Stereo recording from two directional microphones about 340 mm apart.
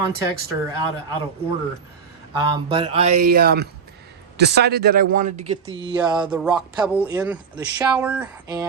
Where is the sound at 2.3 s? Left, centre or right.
Centre.